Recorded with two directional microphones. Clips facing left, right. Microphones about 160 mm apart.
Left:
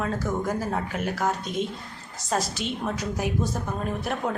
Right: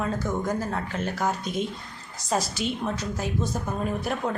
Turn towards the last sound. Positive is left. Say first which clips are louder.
# even
turn(degrees=0)  # may be behind; listen again after turning